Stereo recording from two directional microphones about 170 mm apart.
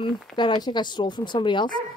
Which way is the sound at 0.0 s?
25° left (ahead or behind).